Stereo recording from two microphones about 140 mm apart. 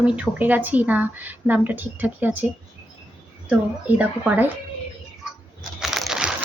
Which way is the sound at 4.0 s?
10° right (ahead or behind).